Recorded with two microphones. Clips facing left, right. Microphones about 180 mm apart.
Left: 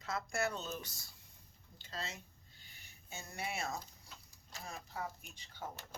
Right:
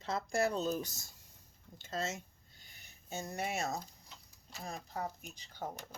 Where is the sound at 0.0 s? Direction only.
30° right (ahead or behind).